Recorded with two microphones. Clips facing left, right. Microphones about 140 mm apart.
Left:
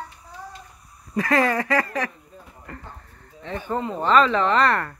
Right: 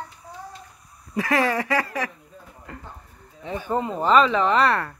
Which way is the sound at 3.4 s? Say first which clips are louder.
Right 2 dB; 10° right (ahead or behind).